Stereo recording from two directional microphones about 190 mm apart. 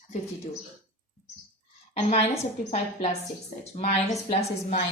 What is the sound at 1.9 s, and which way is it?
A woman's voice, 35° left (ahead or behind).